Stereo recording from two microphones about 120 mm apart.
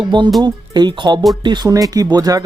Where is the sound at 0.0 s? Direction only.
40° right (ahead or behind).